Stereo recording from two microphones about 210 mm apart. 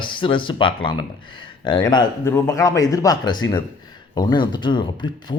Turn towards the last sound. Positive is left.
turn(degrees=20)  # may be behind; listen again after turning